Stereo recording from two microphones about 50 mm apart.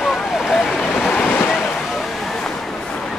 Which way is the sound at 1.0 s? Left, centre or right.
Left.